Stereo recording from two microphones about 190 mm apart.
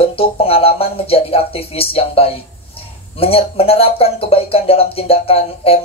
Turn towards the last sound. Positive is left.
turn(degrees=30)  # may be behind; listen again after turning